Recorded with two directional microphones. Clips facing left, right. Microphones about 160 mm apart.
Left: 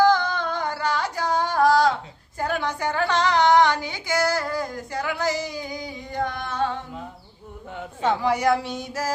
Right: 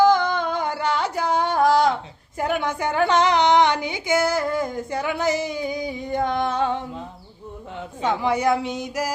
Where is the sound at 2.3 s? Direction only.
20° right (ahead or behind).